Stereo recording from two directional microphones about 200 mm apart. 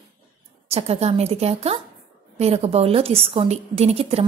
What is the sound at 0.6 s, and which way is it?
A woman's voice, 30° right (ahead or behind).